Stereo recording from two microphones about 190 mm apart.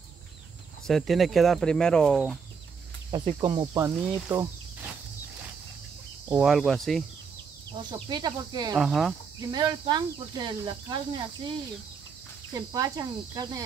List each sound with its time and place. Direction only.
0.8 s speech: centre (ahead or behind)
3.3 s speech: 25° right (ahead or behind)
3.7 s speech: 15° right (ahead or behind)
6.2 s speech: 5° right (ahead or behind)
7.7 s speech: 25° right (ahead or behind)
8.7 s speech: centre (ahead or behind)
9.4 s speech: 20° right (ahead or behind)
12.5 s speech: 20° right (ahead or behind)